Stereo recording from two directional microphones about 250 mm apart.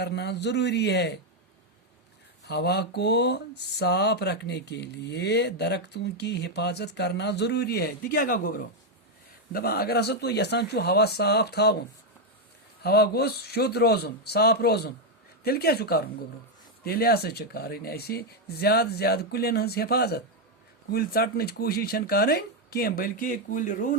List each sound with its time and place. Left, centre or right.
0.0 s a man's voice: left
2.4 s speech: left
12.8 s speech: left